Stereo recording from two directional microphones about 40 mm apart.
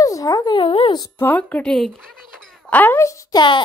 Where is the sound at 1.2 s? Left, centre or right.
Left.